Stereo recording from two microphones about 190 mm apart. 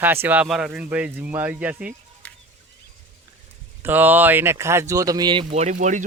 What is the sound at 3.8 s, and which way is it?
Speech, 10° right (ahead or behind).